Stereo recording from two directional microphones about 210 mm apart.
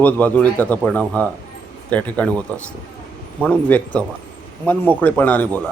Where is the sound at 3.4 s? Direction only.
5° left (ahead or behind).